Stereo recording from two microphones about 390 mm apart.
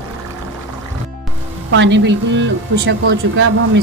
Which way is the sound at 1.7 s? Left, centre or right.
Right.